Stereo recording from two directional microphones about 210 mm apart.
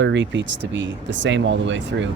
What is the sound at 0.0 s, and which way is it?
Speech, 60° right (ahead or behind).